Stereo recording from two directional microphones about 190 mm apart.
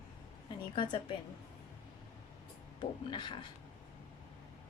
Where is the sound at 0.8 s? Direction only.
25° left (ahead or behind).